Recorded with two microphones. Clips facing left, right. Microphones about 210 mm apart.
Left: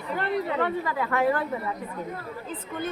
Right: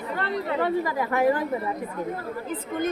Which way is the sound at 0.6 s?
10° right (ahead or behind).